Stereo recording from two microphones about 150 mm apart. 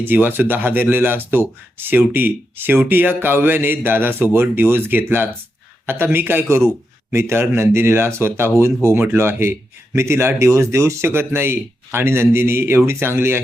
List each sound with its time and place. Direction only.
0.0 s speech: 15° right (ahead or behind)